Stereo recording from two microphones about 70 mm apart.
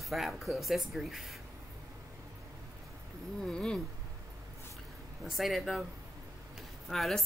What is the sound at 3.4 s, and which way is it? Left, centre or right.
Speech, centre.